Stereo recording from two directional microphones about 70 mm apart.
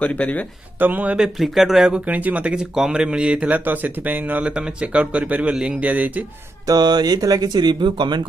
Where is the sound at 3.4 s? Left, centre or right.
Right.